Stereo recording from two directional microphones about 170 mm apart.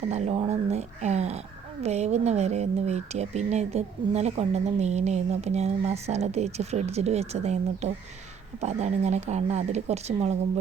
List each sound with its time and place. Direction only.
0.1 s speech: 40° right (ahead or behind)